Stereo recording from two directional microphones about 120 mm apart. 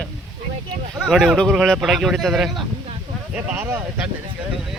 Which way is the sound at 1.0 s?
5° right (ahead or behind).